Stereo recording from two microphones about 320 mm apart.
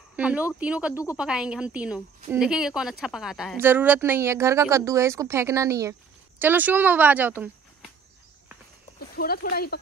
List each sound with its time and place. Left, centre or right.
0.1 s a woman's voice: centre
9.1 s speech: left